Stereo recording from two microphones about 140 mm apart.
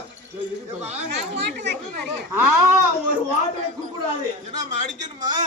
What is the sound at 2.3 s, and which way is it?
Speech, 15° right (ahead or behind).